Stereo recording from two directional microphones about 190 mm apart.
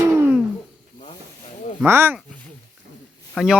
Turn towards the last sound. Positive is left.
turn(degrees=0)  # may be behind; listen again after turning